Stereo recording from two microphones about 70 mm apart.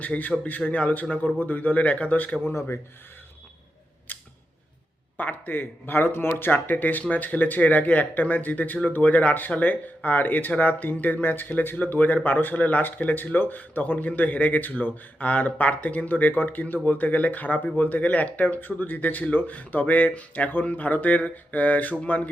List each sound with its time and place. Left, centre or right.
0.0 s speech: left
2.5 s speech: left
4.1 s scissors: left
5.1 s speech: left